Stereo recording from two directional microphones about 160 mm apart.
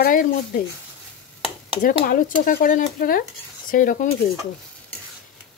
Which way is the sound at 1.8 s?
70° left (ahead or behind).